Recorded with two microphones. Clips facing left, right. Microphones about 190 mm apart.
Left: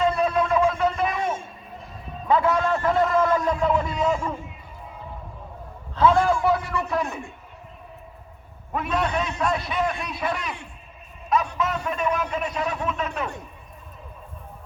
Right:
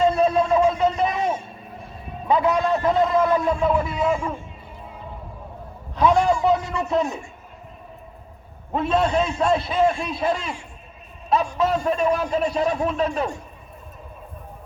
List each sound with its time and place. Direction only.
0.1 s vehicle: 30° right (ahead or behind)
2.2 s a man's voice: 20° right (ahead or behind)
5.9 s a sound: 15° right (ahead or behind)
6.7 s a man's voice: 20° right (ahead or behind)
8.7 s a man's voice: 25° right (ahead or behind)
11.5 s a man's voice: 30° right (ahead or behind)